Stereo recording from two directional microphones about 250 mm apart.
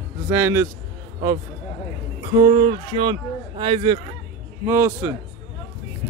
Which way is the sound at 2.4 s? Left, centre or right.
Centre.